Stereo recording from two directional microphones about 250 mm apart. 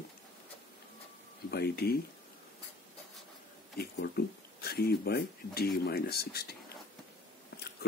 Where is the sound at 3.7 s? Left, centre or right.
Left.